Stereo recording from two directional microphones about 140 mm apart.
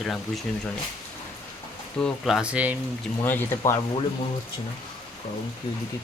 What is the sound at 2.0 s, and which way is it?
Speech, centre (ahead or behind).